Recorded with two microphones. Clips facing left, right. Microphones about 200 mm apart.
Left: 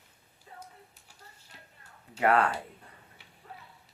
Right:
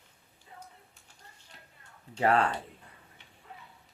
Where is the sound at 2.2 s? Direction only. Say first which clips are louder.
Left 1 dB; 30° right (ahead or behind).